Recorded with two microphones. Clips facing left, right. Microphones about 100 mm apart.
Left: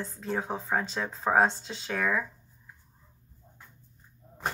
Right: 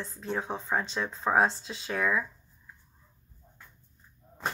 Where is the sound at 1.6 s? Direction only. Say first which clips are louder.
Even; 30° left (ahead or behind).